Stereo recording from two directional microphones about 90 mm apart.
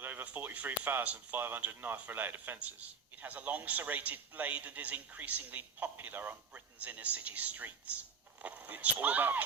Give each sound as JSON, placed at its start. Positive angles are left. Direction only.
{"t": 0.0, "sound": "a man's voice", "side_deg": -20}